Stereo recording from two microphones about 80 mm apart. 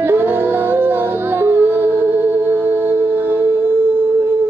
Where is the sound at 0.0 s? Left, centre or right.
Right.